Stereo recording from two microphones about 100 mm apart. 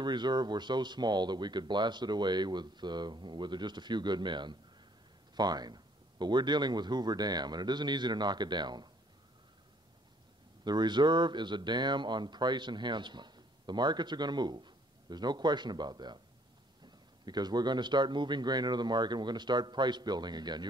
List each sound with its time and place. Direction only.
0.0 s speech: 50° right (ahead or behind)
10.6 s speech: 45° right (ahead or behind)